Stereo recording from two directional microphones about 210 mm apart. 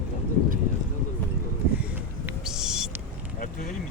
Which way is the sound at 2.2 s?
5° right (ahead or behind).